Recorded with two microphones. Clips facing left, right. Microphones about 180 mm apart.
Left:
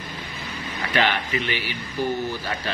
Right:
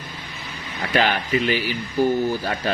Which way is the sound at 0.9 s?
40° right (ahead or behind).